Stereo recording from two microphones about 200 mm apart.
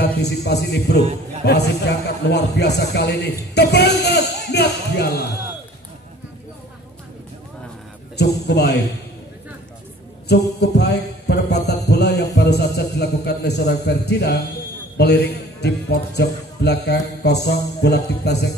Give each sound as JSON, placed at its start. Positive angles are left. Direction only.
{"t": 0.0, "sound": "a man's voice", "side_deg": 55}
{"t": 8.2, "sound": "a man's voice", "side_deg": 55}
{"t": 10.2, "sound": "a sound", "side_deg": 55}
{"t": 15.0, "sound": "a man's voice", "side_deg": 55}